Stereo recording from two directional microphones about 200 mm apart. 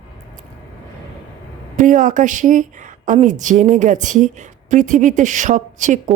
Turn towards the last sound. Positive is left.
turn(degrees=-40)  # may be behind; listen again after turning